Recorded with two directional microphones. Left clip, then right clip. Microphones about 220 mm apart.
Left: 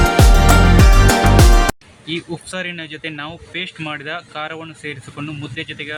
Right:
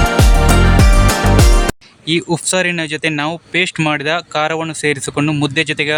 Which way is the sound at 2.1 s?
45° right (ahead or behind).